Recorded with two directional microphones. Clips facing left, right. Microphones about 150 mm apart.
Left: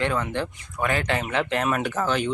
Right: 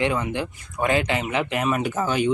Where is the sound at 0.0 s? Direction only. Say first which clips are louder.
Right 1 dB; 10° right (ahead or behind).